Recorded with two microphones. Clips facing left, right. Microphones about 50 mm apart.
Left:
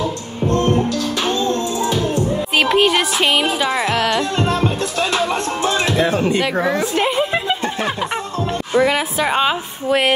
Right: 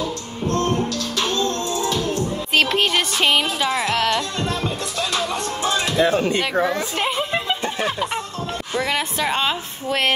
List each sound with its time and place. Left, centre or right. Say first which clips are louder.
0.8 s music: left 4 dB; left
2.5 s speech: left 3 dB; centre
4.4 s music: left 6 dB; left
7.0 s snicker: left 5 dB; centre
7.8 s music: left 2 dB; centre
8.7 s speech: left 7 dB; centre